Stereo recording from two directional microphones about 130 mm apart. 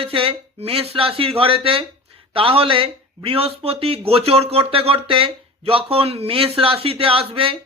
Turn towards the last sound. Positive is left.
turn(degrees=-45)  # may be behind; listen again after turning